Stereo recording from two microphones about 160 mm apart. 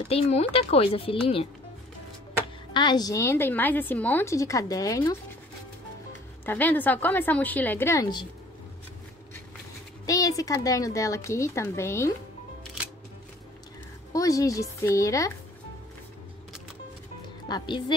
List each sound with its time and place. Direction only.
0.1 s speech: 40° left (ahead or behind)
2.7 s a woman's voice: 25° left (ahead or behind)
6.4 s a woman's voice: 10° left (ahead or behind)
10.0 s a woman's voice: 20° left (ahead or behind)
14.1 s a woman's voice: 20° left (ahead or behind)
17.5 s a woman's voice: 25° left (ahead or behind)